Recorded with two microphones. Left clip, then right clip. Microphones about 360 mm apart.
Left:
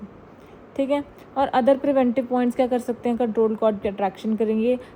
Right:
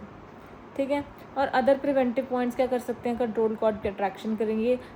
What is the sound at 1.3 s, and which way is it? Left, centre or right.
Speech, centre.